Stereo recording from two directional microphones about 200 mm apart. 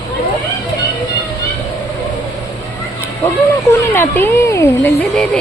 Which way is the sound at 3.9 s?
10° left (ahead or behind).